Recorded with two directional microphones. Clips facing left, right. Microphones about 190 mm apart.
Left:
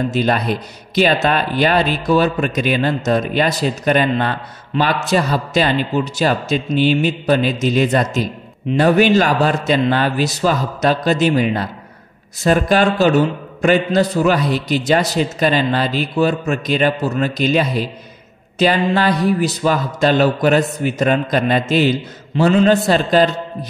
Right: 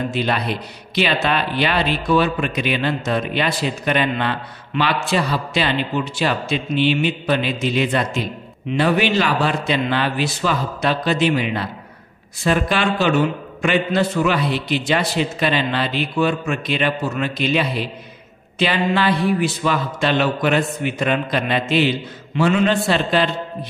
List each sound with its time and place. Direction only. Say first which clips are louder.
0.1 s a man's voice: left 4 dB; 45° left (ahead or behind)